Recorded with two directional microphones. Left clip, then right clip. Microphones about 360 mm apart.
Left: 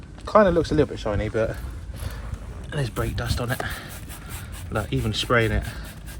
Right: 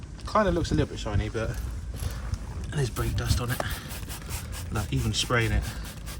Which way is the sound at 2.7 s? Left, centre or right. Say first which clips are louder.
Left 4 dB; centre.